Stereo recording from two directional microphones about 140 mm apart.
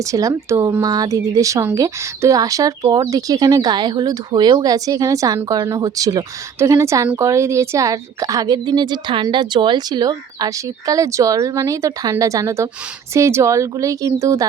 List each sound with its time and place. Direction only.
0.0 s speech: 25° right (ahead or behind)